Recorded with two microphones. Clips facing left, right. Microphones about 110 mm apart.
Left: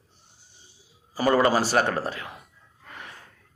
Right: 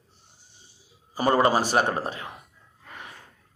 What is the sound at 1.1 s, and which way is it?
A man's voice, 25° right (ahead or behind).